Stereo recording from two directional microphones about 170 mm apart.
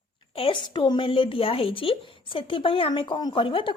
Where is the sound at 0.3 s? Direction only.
30° left (ahead or behind).